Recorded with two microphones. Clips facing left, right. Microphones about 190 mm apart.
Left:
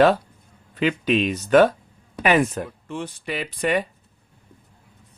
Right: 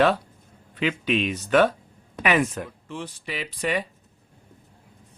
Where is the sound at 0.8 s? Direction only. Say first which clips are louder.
Left 4 dB; 40° left (ahead or behind).